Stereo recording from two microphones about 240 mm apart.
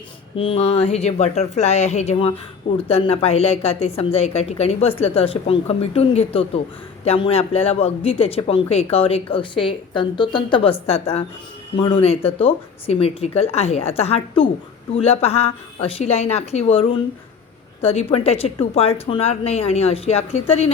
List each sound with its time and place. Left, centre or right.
0.3 s speech: left